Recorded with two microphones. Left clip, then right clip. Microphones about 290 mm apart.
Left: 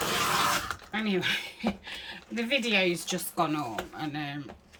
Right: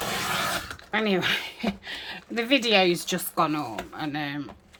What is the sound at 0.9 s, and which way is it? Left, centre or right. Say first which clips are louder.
Speech: right 6 dB; centre.